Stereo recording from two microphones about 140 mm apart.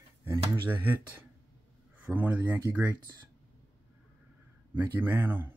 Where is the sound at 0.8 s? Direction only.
15° right (ahead or behind).